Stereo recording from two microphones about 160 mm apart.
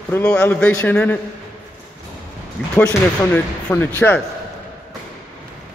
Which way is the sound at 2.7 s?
10° left (ahead or behind).